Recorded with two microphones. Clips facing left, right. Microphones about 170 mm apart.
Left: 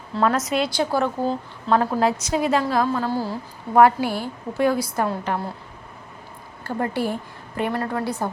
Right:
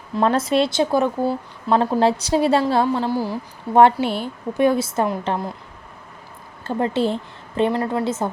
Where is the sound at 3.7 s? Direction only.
25° right (ahead or behind).